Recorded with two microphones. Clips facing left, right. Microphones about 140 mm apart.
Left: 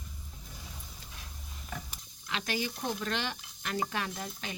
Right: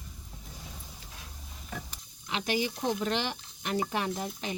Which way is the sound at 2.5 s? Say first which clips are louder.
Right 5 dB; 25° right (ahead or behind).